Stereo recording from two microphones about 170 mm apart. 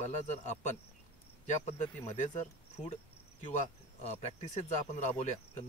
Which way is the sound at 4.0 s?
40° left (ahead or behind).